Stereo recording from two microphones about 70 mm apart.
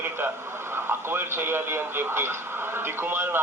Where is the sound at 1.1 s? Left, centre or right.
Right.